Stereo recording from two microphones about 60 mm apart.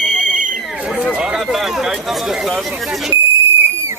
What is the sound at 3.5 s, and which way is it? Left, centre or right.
Whistle, right.